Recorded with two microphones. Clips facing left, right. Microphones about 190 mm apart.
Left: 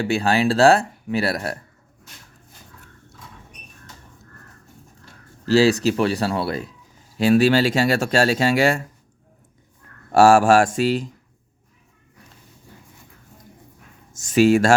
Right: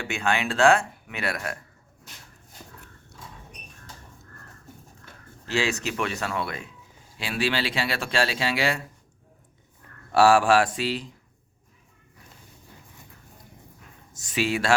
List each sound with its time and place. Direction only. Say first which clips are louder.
0.0 s speech: left 8 dB; 35° left (ahead or behind)
5.5 s speech: left 11 dB; 35° left (ahead or behind)
10.1 s speech: left 5 dB; 45° left (ahead or behind)
14.1 s speech: left 11 dB; 45° left (ahead or behind)